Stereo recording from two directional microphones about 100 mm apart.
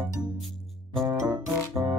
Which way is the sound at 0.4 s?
Centre (ahead or behind).